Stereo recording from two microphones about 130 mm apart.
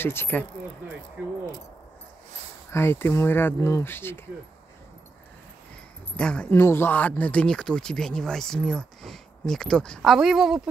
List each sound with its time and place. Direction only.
0.0 s speech: 15° left (ahead or behind)
2.7 s speech: 20° left (ahead or behind)
6.1 s speech: 10° left (ahead or behind)
6.5 s speech: 20° left (ahead or behind); by 10.7 s centre (ahead or behind)